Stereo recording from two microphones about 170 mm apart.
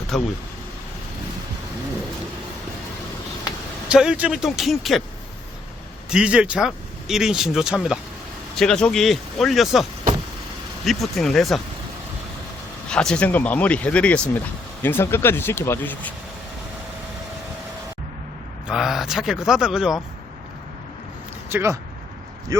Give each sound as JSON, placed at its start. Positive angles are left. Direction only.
{"t": 0.1, "sound": "speech", "side_deg": 0}
{"t": 3.8, "sound": "speech", "side_deg": -5}
{"t": 6.1, "sound": "speech", "side_deg": -5}
{"t": 10.8, "sound": "speech", "side_deg": 0}
{"t": 12.9, "sound": "speech", "side_deg": 5}
{"t": 18.7, "sound": "speech", "side_deg": 0}
{"t": 21.5, "sound": "speech", "side_deg": -15}